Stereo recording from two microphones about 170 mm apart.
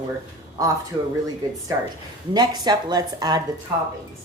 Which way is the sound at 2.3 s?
25° right (ahead or behind).